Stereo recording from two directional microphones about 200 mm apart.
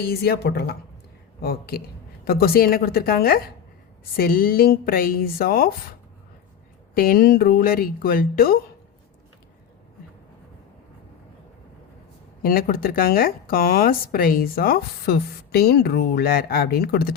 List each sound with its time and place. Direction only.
0.0 s speech: 50° left (ahead or behind)
6.9 s speech: 45° left (ahead or behind)
12.4 s speech: 45° left (ahead or behind)